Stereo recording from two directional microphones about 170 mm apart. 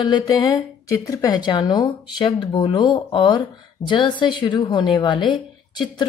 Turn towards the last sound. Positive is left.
turn(degrees=25)  # may be behind; listen again after turning